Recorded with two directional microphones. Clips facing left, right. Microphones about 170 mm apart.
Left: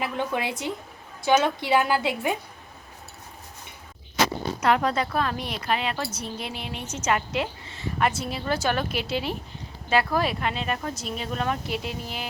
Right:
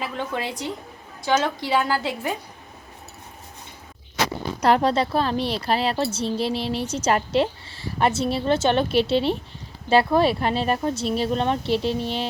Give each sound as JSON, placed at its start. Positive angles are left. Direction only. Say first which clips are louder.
{"t": 0.0, "sound": "a sound", "louder": "left 1 dB", "side_deg": 15}
{"t": 1.3, "sound": "a woman's voice", "louder": "left 1 dB", "side_deg": 20}
{"t": 4.6, "sound": "a woman's voice", "louder": "right 4 dB", "side_deg": -35}